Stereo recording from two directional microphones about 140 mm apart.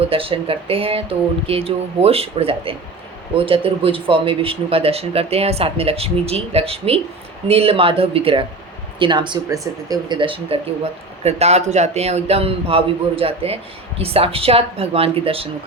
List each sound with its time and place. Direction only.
0.1 s speech: 40° right (ahead or behind)
11.2 s speech: 50° right (ahead or behind)